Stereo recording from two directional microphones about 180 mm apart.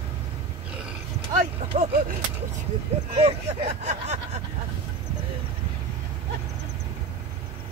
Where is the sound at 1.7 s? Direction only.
35° right (ahead or behind).